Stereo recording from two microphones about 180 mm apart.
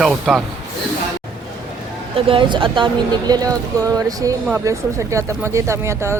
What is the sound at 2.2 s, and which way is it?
Speech, 30° right (ahead or behind).